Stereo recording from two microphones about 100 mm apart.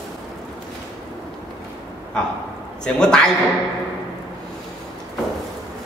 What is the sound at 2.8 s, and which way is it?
Speech, 5° left (ahead or behind).